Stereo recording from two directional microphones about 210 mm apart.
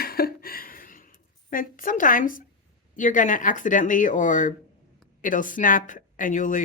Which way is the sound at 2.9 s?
40° left (ahead or behind).